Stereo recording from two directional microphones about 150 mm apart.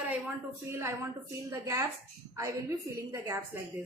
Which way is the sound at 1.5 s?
20° right (ahead or behind).